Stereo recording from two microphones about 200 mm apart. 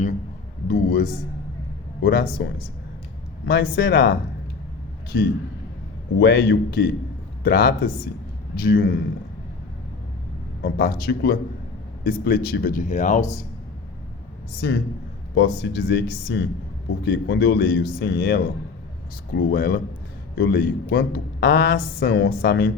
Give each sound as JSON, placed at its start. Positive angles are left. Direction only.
{"t": 0.7, "sound": "a woman's voice", "side_deg": 45}
{"t": 10.6, "sound": "a woman's voice", "side_deg": 50}
{"t": 14.6, "sound": "a woman's voice", "side_deg": 55}